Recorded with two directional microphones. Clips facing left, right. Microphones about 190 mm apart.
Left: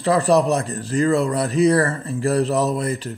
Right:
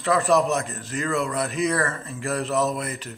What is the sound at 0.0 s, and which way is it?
Speech, 35° left (ahead or behind).